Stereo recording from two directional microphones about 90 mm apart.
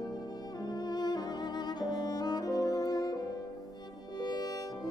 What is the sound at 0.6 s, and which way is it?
Music, 45° left (ahead or behind).